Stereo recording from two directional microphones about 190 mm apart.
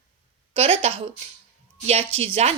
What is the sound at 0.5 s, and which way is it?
A woman's voice, 30° right (ahead or behind).